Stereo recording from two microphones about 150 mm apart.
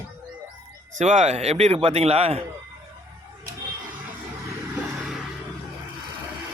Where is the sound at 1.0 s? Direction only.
55° right (ahead or behind).